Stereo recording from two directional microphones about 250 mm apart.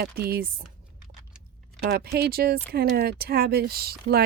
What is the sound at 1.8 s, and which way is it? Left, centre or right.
Speech, right.